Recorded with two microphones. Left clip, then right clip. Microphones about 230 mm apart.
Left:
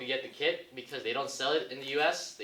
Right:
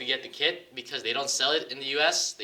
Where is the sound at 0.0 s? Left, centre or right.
Right.